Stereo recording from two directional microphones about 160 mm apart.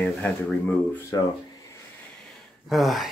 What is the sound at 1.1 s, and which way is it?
Speech, 20° left (ahead or behind).